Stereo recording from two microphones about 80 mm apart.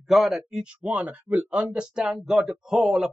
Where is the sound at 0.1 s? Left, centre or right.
Centre.